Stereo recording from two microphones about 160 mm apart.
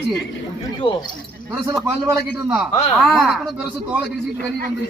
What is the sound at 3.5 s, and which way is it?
Speech, 10° right (ahead or behind).